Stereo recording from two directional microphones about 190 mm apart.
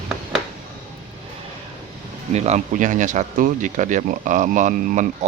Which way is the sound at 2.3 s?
35° right (ahead or behind).